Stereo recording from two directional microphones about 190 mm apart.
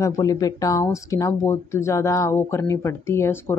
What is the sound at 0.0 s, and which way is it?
Speech, 15° left (ahead or behind).